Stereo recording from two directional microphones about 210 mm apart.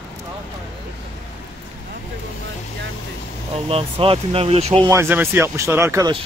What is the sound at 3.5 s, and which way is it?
Speech, 25° right (ahead or behind).